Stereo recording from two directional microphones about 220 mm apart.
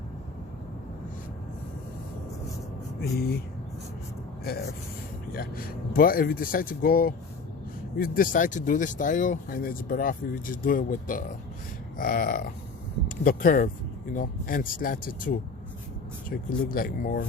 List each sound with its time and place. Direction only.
3.0 s speech: 45° left (ahead or behind)
5.3 s speech: 40° left (ahead or behind)